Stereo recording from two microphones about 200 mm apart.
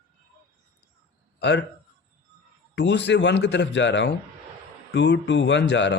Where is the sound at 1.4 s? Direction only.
60° left (ahead or behind).